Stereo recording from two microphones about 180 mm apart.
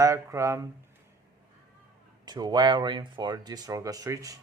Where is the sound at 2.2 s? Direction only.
25° right (ahead or behind).